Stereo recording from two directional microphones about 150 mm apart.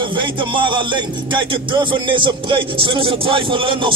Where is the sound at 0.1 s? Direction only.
30° right (ahead or behind).